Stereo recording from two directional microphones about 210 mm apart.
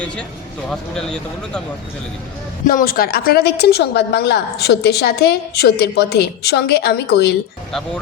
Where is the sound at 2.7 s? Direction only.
45° left (ahead or behind).